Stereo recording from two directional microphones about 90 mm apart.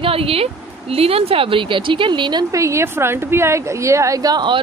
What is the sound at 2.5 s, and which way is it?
A woman's voice, 35° right (ahead or behind).